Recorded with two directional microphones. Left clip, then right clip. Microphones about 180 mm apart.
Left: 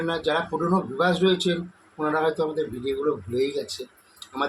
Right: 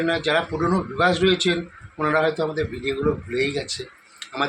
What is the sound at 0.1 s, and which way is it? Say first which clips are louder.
Speech: right 1 dB; 15° right (ahead or behind).